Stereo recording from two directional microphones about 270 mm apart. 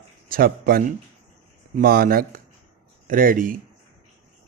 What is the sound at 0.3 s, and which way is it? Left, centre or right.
A man's voice, right.